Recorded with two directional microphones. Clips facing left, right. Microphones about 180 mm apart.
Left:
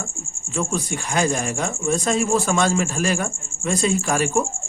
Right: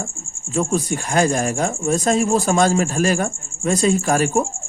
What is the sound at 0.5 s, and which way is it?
Speech, 40° right (ahead or behind).